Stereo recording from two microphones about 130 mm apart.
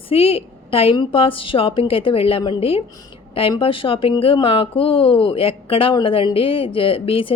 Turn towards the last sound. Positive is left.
turn(degrees=45)  # may be behind; listen again after turning